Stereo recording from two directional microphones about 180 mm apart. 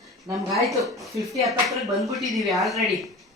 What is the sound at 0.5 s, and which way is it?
Speech, centre (ahead or behind).